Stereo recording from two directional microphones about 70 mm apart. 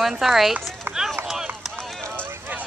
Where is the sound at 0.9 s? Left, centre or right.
Right.